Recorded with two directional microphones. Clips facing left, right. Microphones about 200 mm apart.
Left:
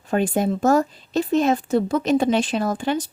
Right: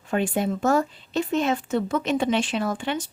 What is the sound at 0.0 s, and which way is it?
Speech, 40° left (ahead or behind).